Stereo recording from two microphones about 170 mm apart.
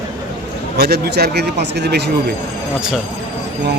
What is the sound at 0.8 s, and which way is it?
Speech, 70° right (ahead or behind).